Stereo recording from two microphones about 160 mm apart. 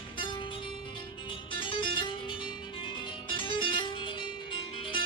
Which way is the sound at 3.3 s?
30° left (ahead or behind).